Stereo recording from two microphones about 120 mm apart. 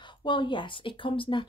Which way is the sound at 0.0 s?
40° left (ahead or behind).